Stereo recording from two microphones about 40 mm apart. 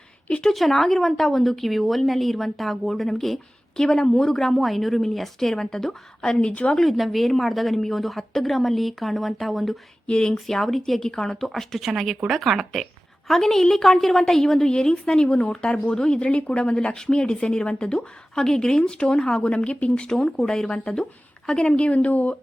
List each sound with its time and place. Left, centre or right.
0.5 s a woman's voice: centre
6.7 s speech: centre
10.1 s speech: centre
10.5 s a woman's voice: centre
11.3 s a woman's voice: centre; by 20.1 s left
20.3 s speech: centre
21.7 s speech: left